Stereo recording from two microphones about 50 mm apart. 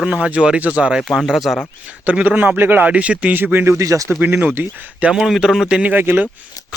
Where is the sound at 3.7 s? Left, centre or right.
Right.